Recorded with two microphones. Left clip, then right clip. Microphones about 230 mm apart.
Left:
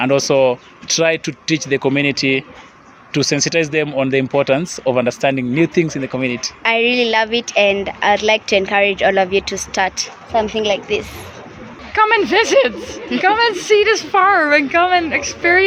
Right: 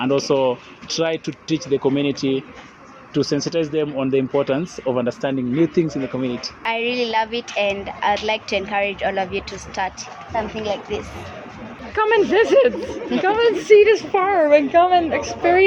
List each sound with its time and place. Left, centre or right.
0.0 s speech: left
3.3 s speech: left
3.9 s speech: left
6.6 s speech: left